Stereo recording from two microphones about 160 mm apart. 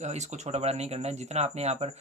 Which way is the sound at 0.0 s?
45° right (ahead or behind).